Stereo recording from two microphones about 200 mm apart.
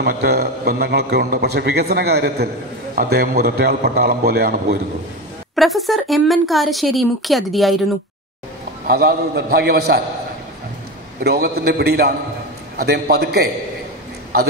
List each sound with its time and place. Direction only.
0.0 s a man's voice: 50° right (ahead or behind)
5.6 s speech: centre (ahead or behind)
8.8 s a man's voice: 50° right (ahead or behind)
11.2 s a man's voice: 50° right (ahead or behind)